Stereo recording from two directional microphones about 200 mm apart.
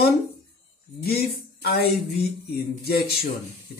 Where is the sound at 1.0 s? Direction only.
50° left (ahead or behind).